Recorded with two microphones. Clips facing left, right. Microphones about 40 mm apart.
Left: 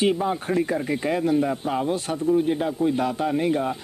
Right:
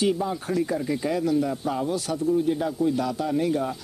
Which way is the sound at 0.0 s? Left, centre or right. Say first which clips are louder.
Left 2 dB; left.